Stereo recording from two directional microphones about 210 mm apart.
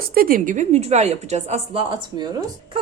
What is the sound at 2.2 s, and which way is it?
Speech, 20° right (ahead or behind).